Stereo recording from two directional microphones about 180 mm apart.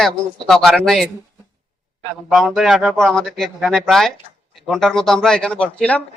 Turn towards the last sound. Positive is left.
turn(degrees=5)  # may be behind; listen again after turning